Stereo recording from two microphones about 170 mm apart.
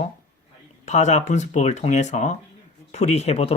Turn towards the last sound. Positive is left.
turn(degrees=35)  # may be behind; listen again after turning